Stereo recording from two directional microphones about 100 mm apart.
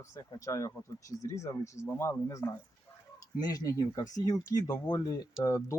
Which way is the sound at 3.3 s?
40° left (ahead or behind).